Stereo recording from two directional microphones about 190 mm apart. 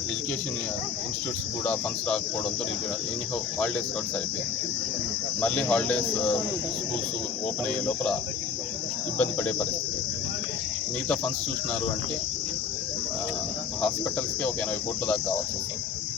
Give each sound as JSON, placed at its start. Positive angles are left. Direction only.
{"t": 1.6, "sound": "speech", "side_deg": 5}
{"t": 5.4, "sound": "speech", "side_deg": 5}
{"t": 7.9, "sound": "speech", "side_deg": 5}
{"t": 15.0, "sound": "speech", "side_deg": 10}